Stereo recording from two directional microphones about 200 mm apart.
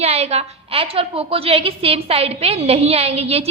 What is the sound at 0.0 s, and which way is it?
A woman's voice, 30° right (ahead or behind).